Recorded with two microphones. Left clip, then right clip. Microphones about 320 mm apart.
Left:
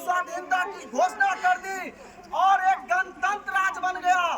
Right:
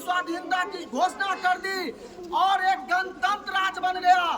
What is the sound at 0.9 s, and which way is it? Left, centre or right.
A man's voice, centre.